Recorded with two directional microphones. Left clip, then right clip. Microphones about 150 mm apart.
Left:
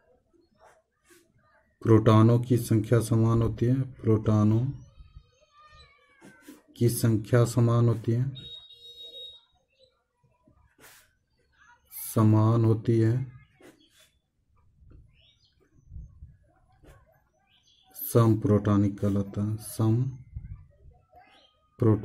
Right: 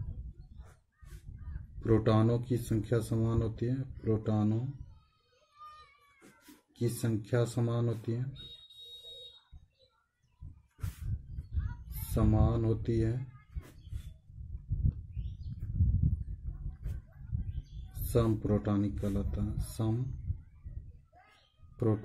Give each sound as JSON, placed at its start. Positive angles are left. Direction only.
{"t": 1.8, "sound": "speech", "side_deg": 30}
{"t": 6.7, "sound": "speech", "side_deg": 30}
{"t": 12.1, "sound": "speech", "side_deg": 25}
{"t": 18.1, "sound": "speech", "side_deg": 25}
{"t": 21.7, "sound": "speech", "side_deg": 25}